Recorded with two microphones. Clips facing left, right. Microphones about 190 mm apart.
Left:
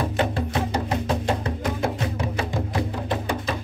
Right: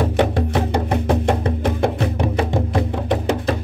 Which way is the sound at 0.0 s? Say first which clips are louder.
Right 6 dB; 70° right (ahead or behind).